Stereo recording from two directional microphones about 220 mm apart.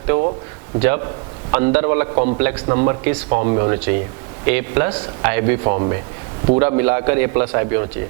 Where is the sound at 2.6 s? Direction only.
25° right (ahead or behind).